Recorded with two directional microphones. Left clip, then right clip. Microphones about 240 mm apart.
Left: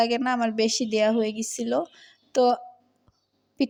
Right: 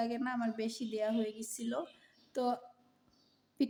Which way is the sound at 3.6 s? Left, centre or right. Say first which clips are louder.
Left 8 dB; left.